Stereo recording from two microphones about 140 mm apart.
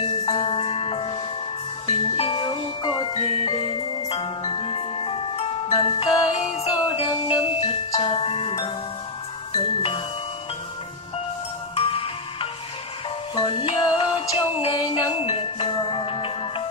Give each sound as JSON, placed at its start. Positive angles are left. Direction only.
{"t": 0.2, "sound": "music", "side_deg": 40}
{"t": 2.1, "sound": "music", "side_deg": 40}
{"t": 6.3, "sound": "music", "side_deg": 50}
{"t": 11.7, "sound": "music", "side_deg": 45}